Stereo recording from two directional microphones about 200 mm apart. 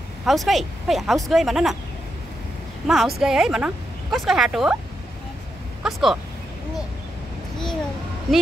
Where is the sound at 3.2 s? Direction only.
Centre (ahead or behind).